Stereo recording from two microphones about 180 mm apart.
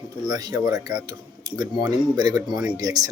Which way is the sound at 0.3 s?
20° right (ahead or behind).